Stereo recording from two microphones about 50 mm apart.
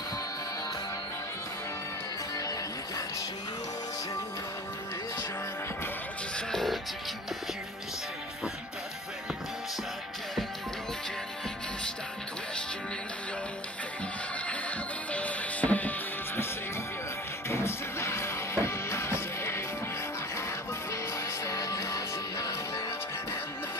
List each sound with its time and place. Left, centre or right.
15.1 s music: left
17.5 s music: left
20.9 s music: left